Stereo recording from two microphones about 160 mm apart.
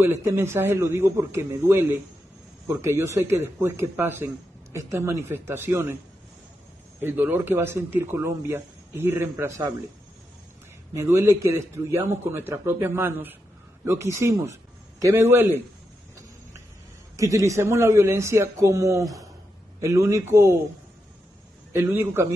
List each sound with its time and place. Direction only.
0.0 s speech: 15° right (ahead or behind)
7.0 s speech: 15° right (ahead or behind)
11.0 s a man's voice: 15° right (ahead or behind)
17.2 s a man's voice: 20° right (ahead or behind)
21.7 s speech: 15° right (ahead or behind)